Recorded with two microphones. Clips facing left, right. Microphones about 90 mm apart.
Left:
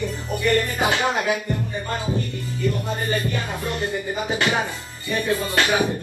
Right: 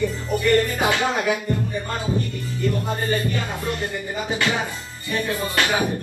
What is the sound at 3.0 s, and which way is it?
Music, 20° left (ahead or behind).